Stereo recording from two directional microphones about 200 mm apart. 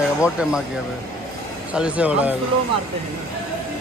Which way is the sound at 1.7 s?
5° right (ahead or behind).